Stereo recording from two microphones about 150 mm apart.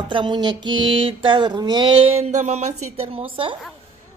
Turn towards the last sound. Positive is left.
turn(degrees=-35)  # may be behind; listen again after turning